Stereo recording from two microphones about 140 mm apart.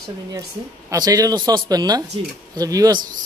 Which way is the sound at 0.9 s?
25° right (ahead or behind).